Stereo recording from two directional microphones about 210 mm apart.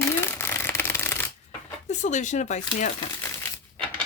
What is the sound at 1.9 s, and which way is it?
Speech, 35° left (ahead or behind).